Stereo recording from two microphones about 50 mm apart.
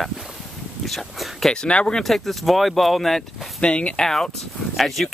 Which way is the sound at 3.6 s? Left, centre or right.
Left.